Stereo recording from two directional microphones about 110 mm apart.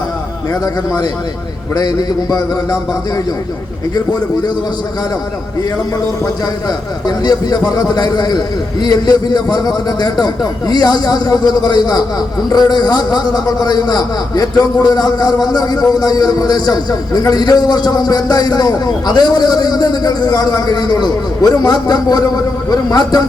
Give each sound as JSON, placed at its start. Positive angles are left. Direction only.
{"t": 0.6, "sound": "a man's voice", "side_deg": 35}
{"t": 7.3, "sound": "a man's voice", "side_deg": 35}